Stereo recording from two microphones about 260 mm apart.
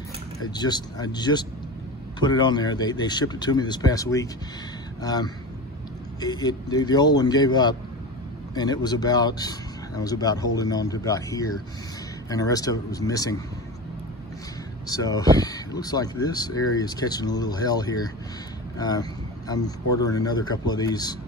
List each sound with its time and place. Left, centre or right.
0.6 s speech: centre
14.9 s speech: centre